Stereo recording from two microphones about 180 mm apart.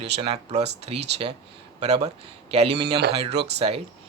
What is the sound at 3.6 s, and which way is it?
Speech, 35° right (ahead or behind).